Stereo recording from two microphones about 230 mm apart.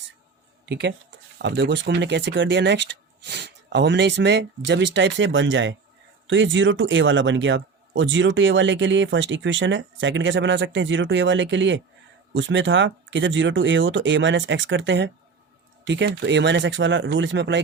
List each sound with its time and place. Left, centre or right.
0.6 s a man's voice: right